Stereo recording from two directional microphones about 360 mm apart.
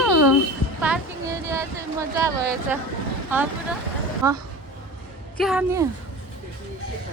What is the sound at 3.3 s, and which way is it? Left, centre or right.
A woman's voice, centre.